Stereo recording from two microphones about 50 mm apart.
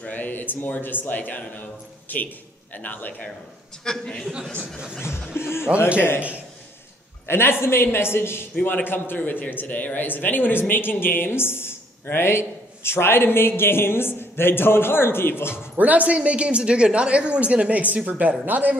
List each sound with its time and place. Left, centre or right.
0.1 s speech: left
3.8 s a man's voice: centre
5.4 s speech: left
7.2 s speech: left
15.7 s a woman's voice: right